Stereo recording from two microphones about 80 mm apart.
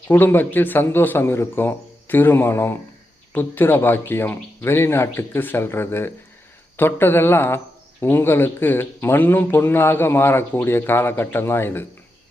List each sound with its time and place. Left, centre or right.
0.1 s speech: left